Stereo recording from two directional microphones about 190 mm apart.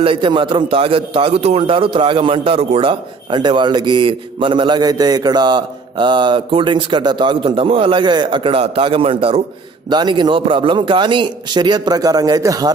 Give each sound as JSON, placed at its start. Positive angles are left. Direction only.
{"t": 0.0, "sound": "a man's voice", "side_deg": -25}